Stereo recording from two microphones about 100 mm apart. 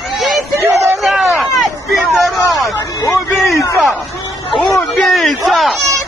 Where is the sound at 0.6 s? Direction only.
30° right (ahead or behind).